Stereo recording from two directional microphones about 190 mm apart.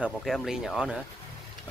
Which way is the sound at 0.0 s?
Centre (ahead or behind).